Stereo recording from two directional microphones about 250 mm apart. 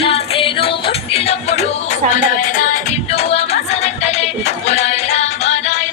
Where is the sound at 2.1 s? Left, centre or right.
Left.